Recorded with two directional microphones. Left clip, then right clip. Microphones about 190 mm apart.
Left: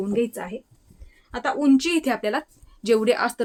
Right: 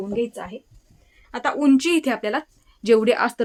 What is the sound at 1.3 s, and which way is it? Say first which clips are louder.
Speech: right 1 dB; 15° right (ahead or behind).